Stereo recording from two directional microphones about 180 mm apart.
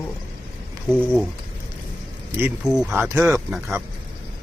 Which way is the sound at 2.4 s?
Centre (ahead or behind).